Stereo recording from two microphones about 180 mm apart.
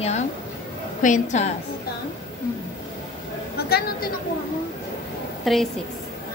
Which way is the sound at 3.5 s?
60° left (ahead or behind).